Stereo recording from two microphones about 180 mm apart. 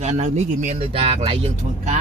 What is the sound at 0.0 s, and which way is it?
Speech, 40° right (ahead or behind).